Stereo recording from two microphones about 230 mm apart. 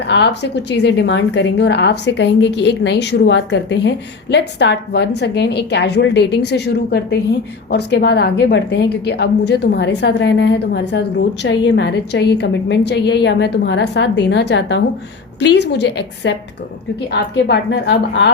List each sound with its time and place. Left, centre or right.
0.0 s a woman's voice: left